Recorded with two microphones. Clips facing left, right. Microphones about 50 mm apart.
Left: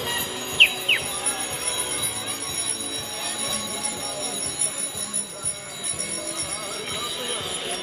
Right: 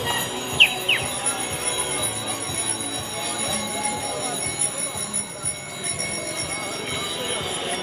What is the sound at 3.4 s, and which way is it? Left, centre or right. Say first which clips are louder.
Bell: right 4 dB; right.